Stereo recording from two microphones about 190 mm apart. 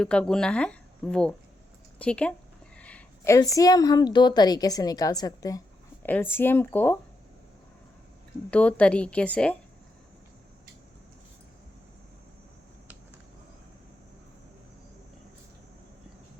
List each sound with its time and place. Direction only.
0.0 s a woman's voice: 5° left (ahead or behind)
8.4 s a woman's voice: 5° left (ahead or behind)